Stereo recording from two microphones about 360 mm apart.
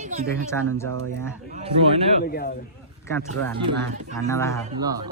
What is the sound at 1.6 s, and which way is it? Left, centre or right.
Speech, centre.